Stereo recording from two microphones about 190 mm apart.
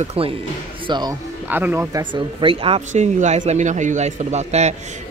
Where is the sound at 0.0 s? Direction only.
30° right (ahead or behind).